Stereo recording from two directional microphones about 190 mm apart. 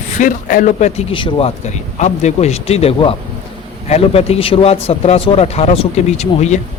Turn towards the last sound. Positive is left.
turn(degrees=35)  # may be behind; listen again after turning